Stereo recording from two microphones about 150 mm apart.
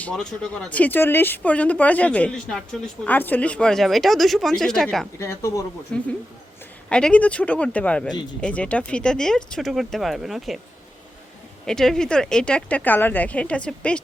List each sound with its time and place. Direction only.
0.0 s speech: 5° left (ahead or behind)
5.2 s speech: 20° left (ahead or behind)
5.9 s speech: 5° left (ahead or behind)
11.6 s speech: 5° left (ahead or behind)